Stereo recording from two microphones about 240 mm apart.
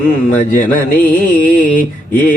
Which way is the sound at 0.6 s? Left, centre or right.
Left.